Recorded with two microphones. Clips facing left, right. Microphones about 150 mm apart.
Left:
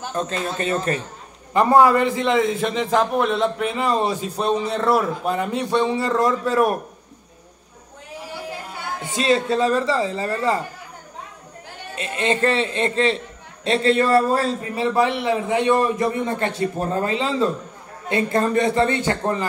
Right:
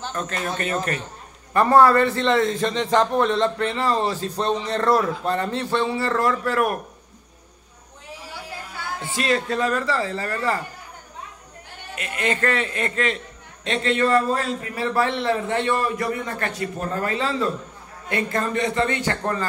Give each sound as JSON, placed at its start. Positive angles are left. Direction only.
{"t": 0.1, "sound": "a man's voice", "side_deg": 30}
{"t": 1.5, "sound": "a man's voice", "side_deg": 15}
{"t": 9.0, "sound": "a man's voice", "side_deg": 20}
{"t": 11.9, "sound": "a man's voice", "side_deg": 25}
{"t": 14.8, "sound": "a man's voice", "side_deg": 15}